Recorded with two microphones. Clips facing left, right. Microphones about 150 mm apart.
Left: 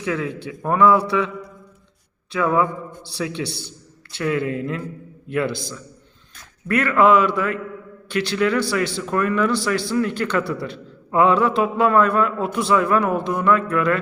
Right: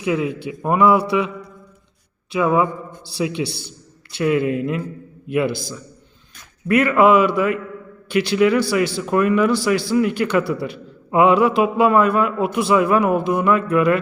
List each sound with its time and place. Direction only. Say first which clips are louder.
0.0 s a man's voice: right 4 dB; 15° right (ahead or behind)
2.3 s a man's voice: right 2 dB; 15° right (ahead or behind)